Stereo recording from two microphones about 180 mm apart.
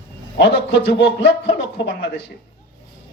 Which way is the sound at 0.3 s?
75° left (ahead or behind).